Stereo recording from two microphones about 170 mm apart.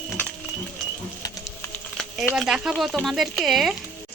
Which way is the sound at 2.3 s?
5° right (ahead or behind).